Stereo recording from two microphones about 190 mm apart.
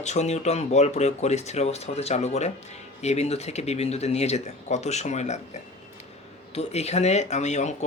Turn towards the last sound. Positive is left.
turn(degrees=35)  # may be behind; listen again after turning